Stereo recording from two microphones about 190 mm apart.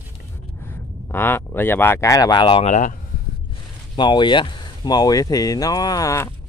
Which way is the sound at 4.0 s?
25° left (ahead or behind).